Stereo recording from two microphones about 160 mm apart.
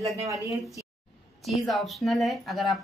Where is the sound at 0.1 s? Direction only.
20° right (ahead or behind).